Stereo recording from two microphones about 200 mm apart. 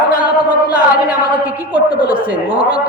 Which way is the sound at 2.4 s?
20° left (ahead or behind).